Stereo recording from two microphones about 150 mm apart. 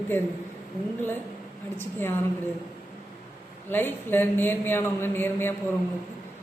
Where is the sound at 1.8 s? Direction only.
15° left (ahead or behind).